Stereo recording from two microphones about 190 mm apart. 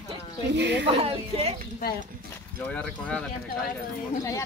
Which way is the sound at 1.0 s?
30° right (ahead or behind).